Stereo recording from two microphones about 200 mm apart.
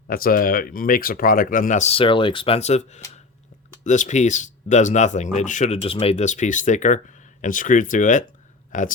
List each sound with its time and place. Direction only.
0.1 s speech: 45° left (ahead or behind)